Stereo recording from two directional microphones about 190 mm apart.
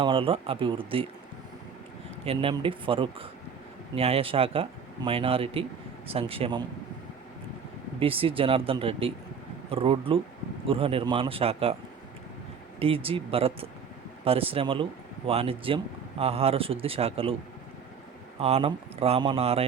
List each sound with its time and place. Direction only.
0.0 s speech: 25° right (ahead or behind)
2.2 s speech: 30° right (ahead or behind)
7.9 s speech: 30° right (ahead or behind)
12.8 s speech: 30° right (ahead or behind)
18.3 s speech: 30° right (ahead or behind)